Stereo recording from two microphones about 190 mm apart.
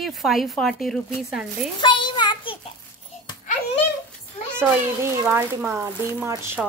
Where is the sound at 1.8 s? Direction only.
25° left (ahead or behind).